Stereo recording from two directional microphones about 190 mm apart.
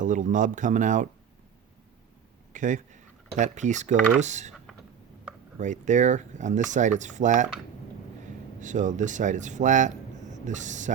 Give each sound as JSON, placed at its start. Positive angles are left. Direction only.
{"t": 0.0, "sound": "speech", "side_deg": -40}
{"t": 2.5, "sound": "speech", "side_deg": -40}
{"t": 5.5, "sound": "speech", "side_deg": -40}
{"t": 8.6, "sound": "speech", "side_deg": -40}